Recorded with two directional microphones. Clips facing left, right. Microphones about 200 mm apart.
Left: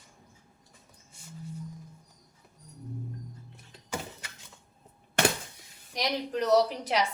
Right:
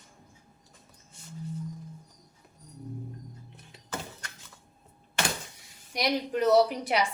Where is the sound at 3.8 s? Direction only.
10° left (ahead or behind).